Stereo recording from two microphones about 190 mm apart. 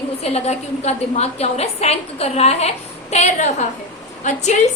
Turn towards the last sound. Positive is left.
turn(degrees=40)  # may be behind; listen again after turning